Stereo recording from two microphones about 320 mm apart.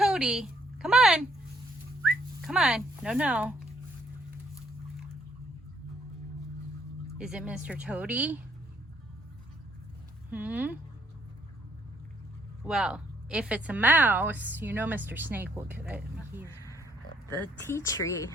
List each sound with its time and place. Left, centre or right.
0.0 s a woman's voice: centre
7.2 s a woman's voice: centre
10.3 s a woman's voice: centre
12.6 s a woman's voice: centre
17.4 s speech: centre